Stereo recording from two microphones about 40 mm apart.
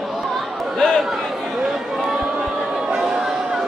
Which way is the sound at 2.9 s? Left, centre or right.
Centre.